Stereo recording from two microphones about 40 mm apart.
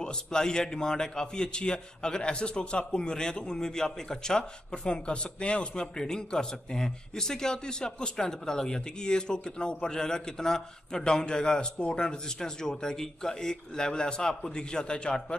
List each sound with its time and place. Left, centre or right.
0.0 s a man's voice: centre